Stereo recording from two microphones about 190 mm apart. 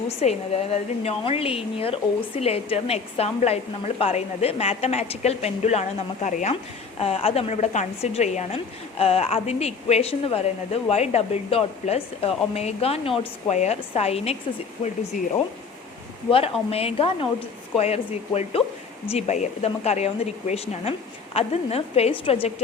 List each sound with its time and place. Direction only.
0.2 s a woman's voice: 35° left (ahead or behind)
16.3 s a woman's voice: 30° left (ahead or behind)